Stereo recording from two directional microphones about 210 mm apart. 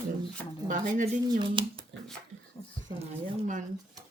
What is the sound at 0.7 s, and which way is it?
Speech, 35° right (ahead or behind).